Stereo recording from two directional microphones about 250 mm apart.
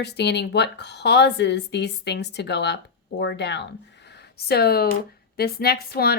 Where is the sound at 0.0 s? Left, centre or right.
Left.